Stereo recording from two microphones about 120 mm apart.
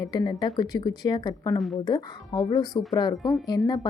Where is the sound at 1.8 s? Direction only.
35° left (ahead or behind).